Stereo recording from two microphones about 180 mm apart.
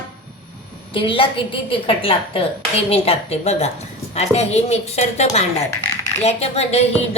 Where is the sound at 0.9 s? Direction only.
30° left (ahead or behind).